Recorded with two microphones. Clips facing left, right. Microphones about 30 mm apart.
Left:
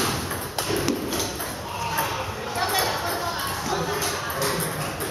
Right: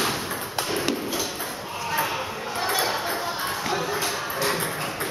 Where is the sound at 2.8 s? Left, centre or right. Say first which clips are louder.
Even; centre.